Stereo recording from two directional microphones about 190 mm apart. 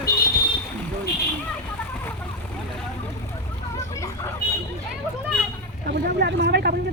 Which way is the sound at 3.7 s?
15° left (ahead or behind).